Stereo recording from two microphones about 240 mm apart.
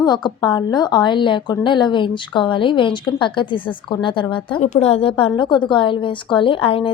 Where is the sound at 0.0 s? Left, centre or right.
Centre.